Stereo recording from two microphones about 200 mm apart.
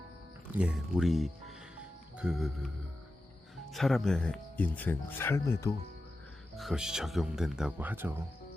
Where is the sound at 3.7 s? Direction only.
Centre (ahead or behind).